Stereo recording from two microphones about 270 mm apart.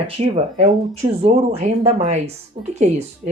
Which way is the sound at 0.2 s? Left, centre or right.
Right.